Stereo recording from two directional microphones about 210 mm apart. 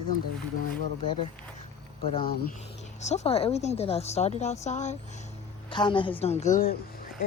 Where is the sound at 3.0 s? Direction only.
30° left (ahead or behind).